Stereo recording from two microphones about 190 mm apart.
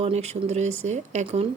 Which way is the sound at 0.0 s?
35° right (ahead or behind).